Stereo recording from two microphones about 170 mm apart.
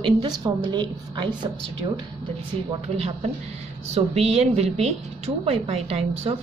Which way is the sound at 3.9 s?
40° right (ahead or behind).